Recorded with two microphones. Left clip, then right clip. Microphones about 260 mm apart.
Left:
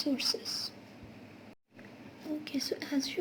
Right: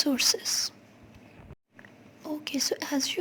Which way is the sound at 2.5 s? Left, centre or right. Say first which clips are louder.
Right 8 dB; right.